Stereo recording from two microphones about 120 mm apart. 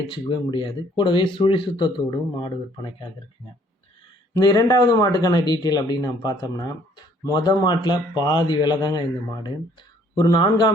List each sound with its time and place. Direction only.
0.1 s speech: 45° left (ahead or behind)
4.4 s speech: 30° left (ahead or behind)